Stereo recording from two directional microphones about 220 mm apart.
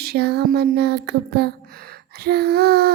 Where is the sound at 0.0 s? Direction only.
45° right (ahead or behind).